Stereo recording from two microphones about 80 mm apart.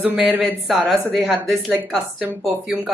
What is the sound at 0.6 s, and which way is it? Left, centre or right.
Speech, centre.